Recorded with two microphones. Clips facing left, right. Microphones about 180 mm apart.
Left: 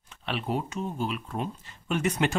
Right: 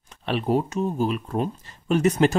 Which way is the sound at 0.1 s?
40° right (ahead or behind).